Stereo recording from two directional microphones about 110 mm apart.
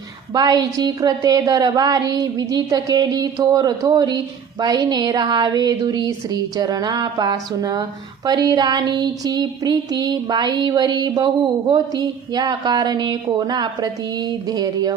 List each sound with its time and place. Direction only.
0.3 s speech: 35° right (ahead or behind)